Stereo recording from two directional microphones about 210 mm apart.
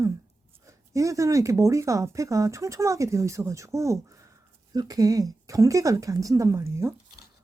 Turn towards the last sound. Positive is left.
turn(degrees=-15)  # may be behind; listen again after turning